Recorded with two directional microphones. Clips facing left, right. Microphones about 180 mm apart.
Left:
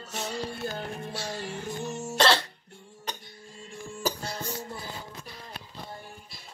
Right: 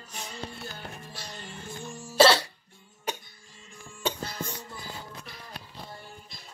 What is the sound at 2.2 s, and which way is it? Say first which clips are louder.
Music: right 4 dB; 5° right (ahead or behind).